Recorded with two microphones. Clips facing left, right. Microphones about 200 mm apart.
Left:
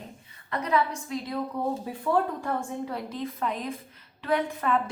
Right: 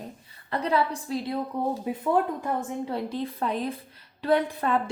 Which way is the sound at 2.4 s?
20° right (ahead or behind).